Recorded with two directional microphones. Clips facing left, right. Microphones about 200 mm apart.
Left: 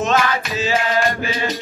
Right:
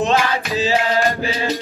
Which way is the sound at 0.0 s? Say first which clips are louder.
Right 1 dB; 30° right (ahead or behind).